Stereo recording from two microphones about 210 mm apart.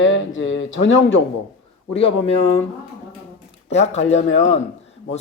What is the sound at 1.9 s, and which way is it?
Speech, 30° left (ahead or behind).